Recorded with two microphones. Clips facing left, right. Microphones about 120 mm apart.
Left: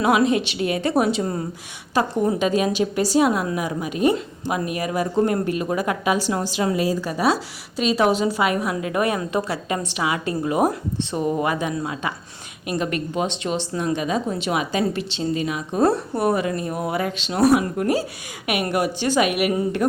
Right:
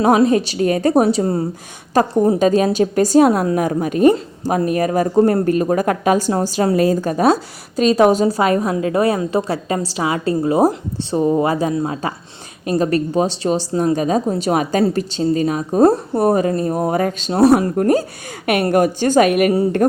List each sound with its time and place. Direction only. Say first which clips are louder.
0.0 s a woman's voice: right 5 dB; 40° right (ahead or behind)
1.9 s a woman's voice: right 6 dB; 45° right (ahead or behind)